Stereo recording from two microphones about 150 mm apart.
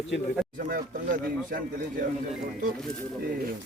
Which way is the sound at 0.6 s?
65° right (ahead or behind).